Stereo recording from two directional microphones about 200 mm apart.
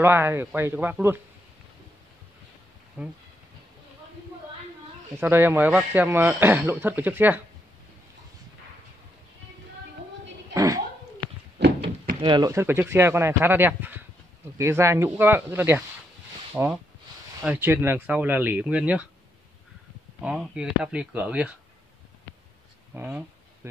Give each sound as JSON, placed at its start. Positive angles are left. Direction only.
{"t": 0.0, "sound": "speech", "side_deg": -10}
{"t": 3.0, "sound": "speech", "side_deg": -10}
{"t": 5.2, "sound": "speech", "side_deg": -10}
{"t": 10.5, "sound": "a sound", "side_deg": -15}
{"t": 12.2, "sound": "speech", "side_deg": -20}
{"t": 20.2, "sound": "speech", "side_deg": -5}
{"t": 22.9, "sound": "a sound", "side_deg": -10}